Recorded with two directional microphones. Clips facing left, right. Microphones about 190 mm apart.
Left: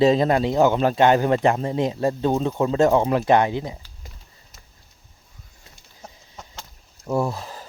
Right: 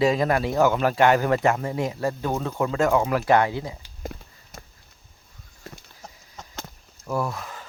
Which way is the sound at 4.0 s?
50° right (ahead or behind).